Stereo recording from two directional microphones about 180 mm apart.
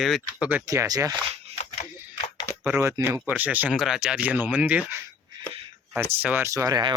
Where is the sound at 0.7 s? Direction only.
20° right (ahead or behind).